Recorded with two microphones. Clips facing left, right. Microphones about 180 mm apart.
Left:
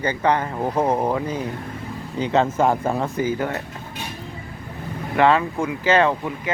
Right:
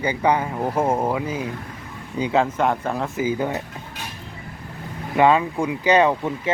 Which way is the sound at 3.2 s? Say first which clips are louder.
Right 3 dB; 15° right (ahead or behind).